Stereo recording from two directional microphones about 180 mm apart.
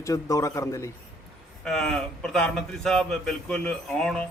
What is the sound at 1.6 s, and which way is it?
Speech, centre (ahead or behind).